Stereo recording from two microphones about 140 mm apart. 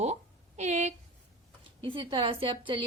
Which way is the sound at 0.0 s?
50° right (ahead or behind).